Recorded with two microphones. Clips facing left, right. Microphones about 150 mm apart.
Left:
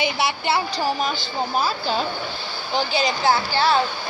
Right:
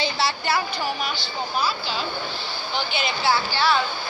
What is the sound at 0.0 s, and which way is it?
Speech, 20° left (ahead or behind).